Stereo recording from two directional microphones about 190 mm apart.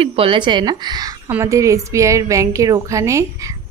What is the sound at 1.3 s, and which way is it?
Speech, 15° right (ahead or behind).